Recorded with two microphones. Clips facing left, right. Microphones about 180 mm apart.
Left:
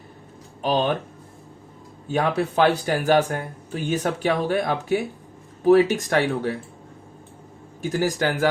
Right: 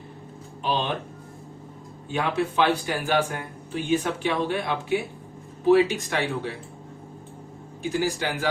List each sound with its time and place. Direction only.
0.6 s speech: 40° left (ahead or behind)
2.0 s speech: 40° left (ahead or behind)
7.8 s speech: 45° left (ahead or behind)